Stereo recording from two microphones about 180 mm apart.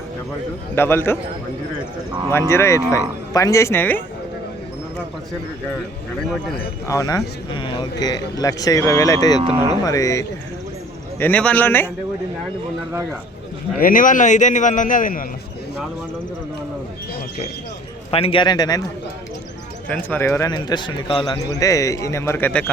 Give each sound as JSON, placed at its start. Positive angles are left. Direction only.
{"t": 0.8, "sound": "speech", "side_deg": 15}
{"t": 2.5, "sound": "speech", "side_deg": 15}
{"t": 6.8, "sound": "speech", "side_deg": 20}
{"t": 13.7, "sound": "a man's voice", "side_deg": 50}
{"t": 18.1, "sound": "speech", "side_deg": 30}
{"t": 19.9, "sound": "speech", "side_deg": 10}